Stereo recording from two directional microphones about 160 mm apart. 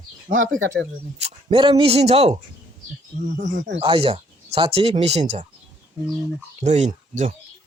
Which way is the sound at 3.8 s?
35° right (ahead or behind).